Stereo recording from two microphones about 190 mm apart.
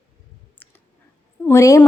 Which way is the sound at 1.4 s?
15° left (ahead or behind).